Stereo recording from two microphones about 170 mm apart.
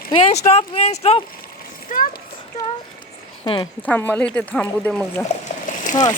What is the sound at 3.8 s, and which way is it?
Speech, 10° left (ahead or behind).